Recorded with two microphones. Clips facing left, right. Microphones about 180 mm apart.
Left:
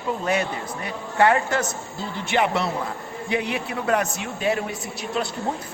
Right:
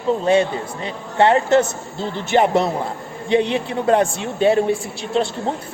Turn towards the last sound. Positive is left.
turn(degrees=-30)  # may be behind; listen again after turning